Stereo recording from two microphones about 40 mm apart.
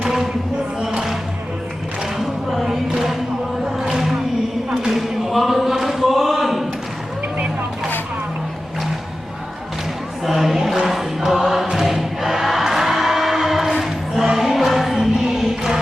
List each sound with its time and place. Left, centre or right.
0.0 s a sound: centre
2.5 s music: centre
3.7 s a sound: centre
10.2 s chant: centre
11.7 s choir: centre
14.3 s music: centre